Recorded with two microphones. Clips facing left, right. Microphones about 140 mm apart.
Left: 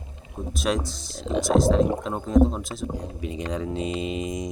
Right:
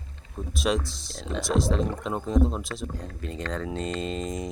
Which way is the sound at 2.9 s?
10° left (ahead or behind).